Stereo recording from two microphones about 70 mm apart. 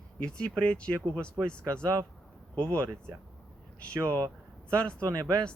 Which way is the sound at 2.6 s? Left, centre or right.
Centre.